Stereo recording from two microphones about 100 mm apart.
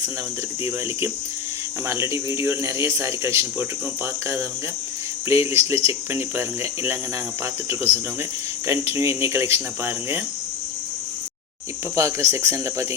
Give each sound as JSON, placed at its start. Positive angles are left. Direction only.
{"t": 1.9, "sound": "speech", "side_deg": -25}
{"t": 5.3, "sound": "speech", "side_deg": -25}
{"t": 8.6, "sound": "speech", "side_deg": -30}
{"t": 11.9, "sound": "speech", "side_deg": -30}